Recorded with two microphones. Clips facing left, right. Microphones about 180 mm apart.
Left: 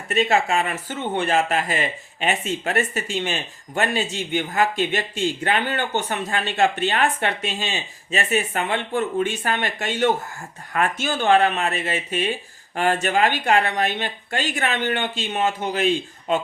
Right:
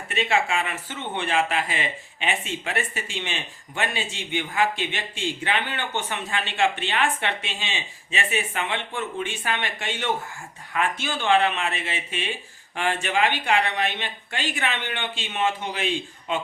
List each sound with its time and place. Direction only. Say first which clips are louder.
0.1 s speech: left 4 dB; 40° left (ahead or behind)